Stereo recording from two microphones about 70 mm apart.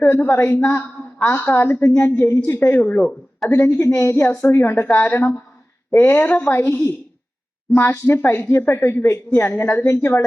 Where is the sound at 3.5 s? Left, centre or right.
Left.